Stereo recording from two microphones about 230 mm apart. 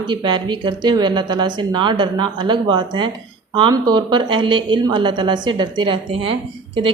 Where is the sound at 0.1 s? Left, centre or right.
Centre.